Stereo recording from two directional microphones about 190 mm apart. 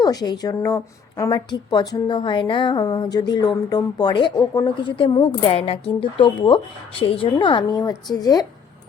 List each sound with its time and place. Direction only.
0.0 s a woman's voice: 20° left (ahead or behind)